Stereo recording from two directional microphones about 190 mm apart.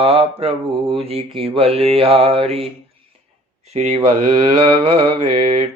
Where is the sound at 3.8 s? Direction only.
35° right (ahead or behind).